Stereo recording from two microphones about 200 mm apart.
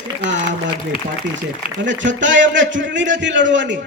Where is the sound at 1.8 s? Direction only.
65° right (ahead or behind).